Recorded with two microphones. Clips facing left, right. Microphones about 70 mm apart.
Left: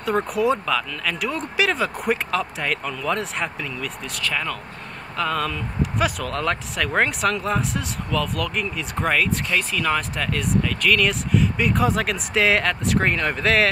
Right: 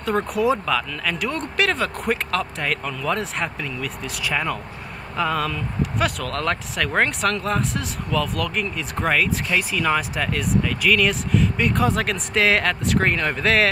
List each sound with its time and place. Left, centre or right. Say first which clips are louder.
0.0 s speech: even; centre